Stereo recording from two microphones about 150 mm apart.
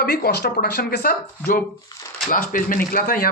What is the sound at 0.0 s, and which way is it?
Speech, 90° left.